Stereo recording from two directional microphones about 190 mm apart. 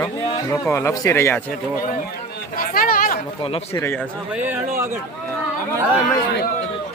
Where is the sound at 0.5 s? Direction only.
15° left (ahead or behind).